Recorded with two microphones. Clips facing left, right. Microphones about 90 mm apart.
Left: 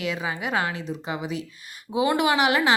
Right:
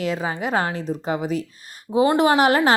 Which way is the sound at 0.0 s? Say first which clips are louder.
Right 4 dB; 40° right (ahead or behind).